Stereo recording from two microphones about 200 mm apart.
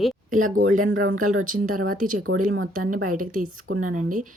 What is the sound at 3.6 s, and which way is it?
Speech, 80° right.